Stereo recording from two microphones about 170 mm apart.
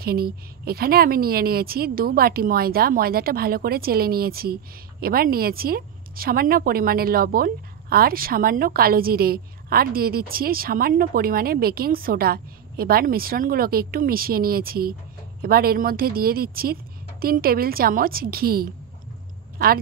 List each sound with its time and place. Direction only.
0.0 s a woman's voice: 65° right (ahead or behind)